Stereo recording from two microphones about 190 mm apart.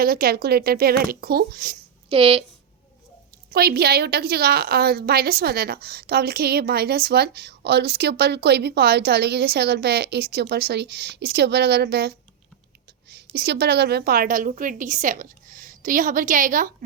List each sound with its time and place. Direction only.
0.0 s speech: 50° right (ahead or behind)
2.0 s speech: 30° right (ahead or behind)
3.5 s a woman's voice: 55° right (ahead or behind)